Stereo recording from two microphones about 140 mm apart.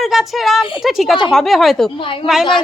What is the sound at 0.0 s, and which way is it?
A woman's voice, centre (ahead or behind).